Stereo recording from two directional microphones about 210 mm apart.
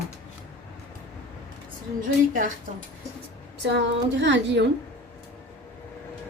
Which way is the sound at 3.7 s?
55° right (ahead or behind).